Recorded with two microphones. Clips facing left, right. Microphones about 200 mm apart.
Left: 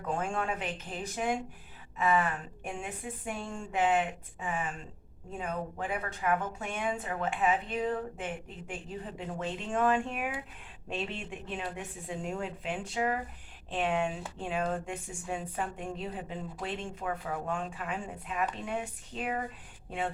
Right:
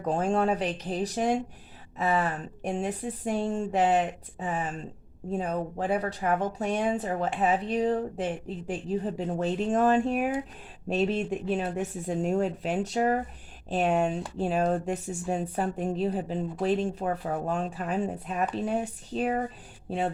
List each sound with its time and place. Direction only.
0.0 s speech: 35° right (ahead or behind)